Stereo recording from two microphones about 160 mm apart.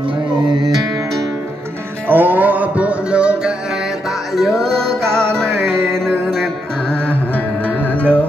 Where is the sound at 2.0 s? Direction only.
10° right (ahead or behind); by 6.5 s 5° left (ahead or behind).